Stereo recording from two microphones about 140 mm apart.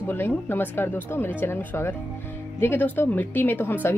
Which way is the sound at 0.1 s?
15° left (ahead or behind).